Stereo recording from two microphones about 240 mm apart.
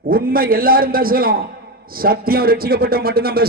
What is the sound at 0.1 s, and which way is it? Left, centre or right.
A man's voice, right.